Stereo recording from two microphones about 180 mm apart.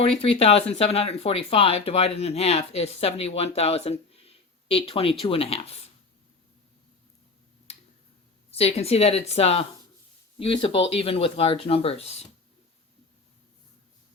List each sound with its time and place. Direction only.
0.0 s speech: 35° left (ahead or behind)
7.7 s tick-tock: 35° left (ahead or behind)
8.4 s speech: 35° left (ahead or behind)